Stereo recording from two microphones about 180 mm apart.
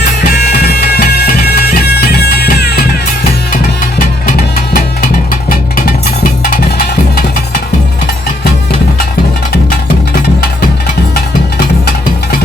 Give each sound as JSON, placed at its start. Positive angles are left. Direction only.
{"t": 0.0, "sound": "bagpipes", "side_deg": 60}
{"t": 3.9, "sound": "music", "side_deg": 50}